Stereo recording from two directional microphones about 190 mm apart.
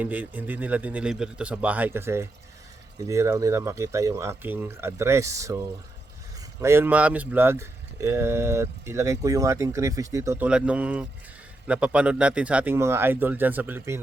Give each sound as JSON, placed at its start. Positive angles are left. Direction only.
{"t": 0.0, "sound": "speech", "side_deg": -10}